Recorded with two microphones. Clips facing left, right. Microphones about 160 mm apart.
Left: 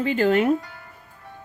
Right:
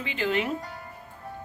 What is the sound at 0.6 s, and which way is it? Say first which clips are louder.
Speech: right 2 dB; 40° right (ahead or behind).